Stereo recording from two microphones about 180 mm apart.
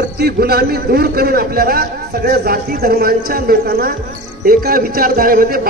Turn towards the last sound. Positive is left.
turn(degrees=-50)  # may be behind; listen again after turning